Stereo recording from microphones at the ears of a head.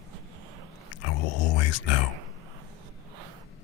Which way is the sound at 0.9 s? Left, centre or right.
Left.